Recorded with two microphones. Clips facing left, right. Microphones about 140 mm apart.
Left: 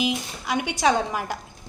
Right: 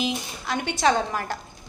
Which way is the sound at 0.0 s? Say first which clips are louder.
Left 2 dB; 10° left (ahead or behind).